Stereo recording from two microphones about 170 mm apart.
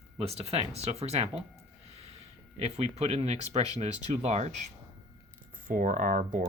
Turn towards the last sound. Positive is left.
turn(degrees=-50)  # may be behind; listen again after turning